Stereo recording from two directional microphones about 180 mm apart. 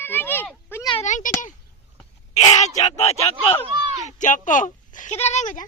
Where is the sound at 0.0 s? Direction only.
10° left (ahead or behind).